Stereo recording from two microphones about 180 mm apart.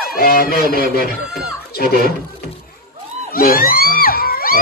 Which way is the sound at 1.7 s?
60° left (ahead or behind).